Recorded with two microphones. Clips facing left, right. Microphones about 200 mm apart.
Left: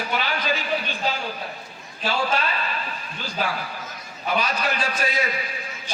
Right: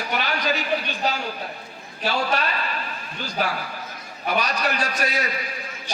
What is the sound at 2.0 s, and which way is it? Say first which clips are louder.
Speech: even; 40° right (ahead or behind).